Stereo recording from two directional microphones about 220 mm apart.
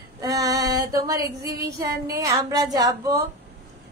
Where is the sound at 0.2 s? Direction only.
15° right (ahead or behind).